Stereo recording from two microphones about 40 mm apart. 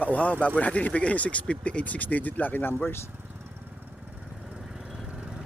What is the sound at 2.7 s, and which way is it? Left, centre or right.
Speech, left.